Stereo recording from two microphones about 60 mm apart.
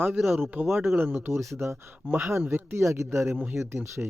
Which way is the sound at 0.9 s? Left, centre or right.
Right.